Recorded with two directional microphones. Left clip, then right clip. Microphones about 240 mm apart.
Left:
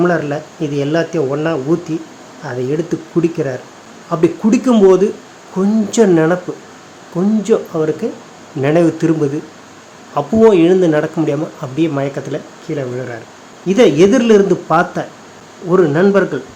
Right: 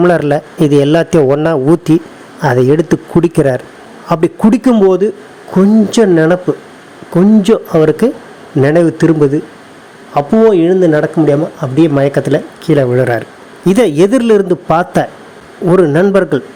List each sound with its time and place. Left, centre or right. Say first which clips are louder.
0.0 s a man's voice: right 6 dB; right
10.5 s a man's voice: right 2 dB; centre